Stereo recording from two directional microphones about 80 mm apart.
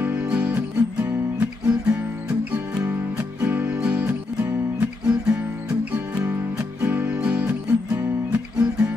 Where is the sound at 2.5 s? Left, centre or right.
Centre.